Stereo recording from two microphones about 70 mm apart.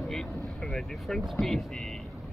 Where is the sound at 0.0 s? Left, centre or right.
Centre.